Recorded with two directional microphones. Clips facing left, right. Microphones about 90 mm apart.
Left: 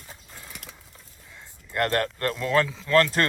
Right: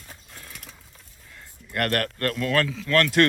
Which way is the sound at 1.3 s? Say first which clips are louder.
Left 1 dB; 20° left (ahead or behind).